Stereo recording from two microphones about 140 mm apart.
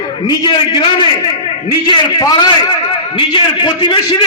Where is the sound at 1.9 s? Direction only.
30° left (ahead or behind).